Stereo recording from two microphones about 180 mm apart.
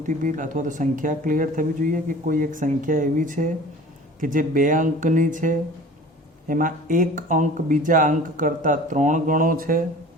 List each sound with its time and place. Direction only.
0.0 s speech: 45° right (ahead or behind)